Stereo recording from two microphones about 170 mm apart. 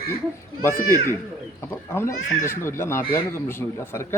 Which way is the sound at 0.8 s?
55° left (ahead or behind).